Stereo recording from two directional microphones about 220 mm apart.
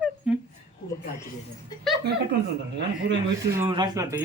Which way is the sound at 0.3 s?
5° right (ahead or behind).